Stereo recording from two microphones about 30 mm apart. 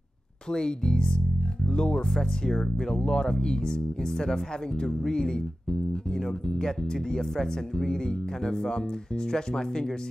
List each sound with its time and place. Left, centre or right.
0.5 s speech: left